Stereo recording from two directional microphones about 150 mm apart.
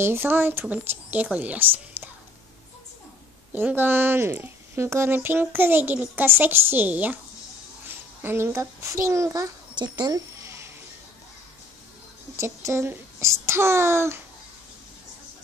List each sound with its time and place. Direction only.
0.0 s speech: 15° right (ahead or behind)
3.5 s speech: 15° right (ahead or behind)
8.2 s a child's voice: 15° right (ahead or behind)
12.4 s speech: 20° right (ahead or behind)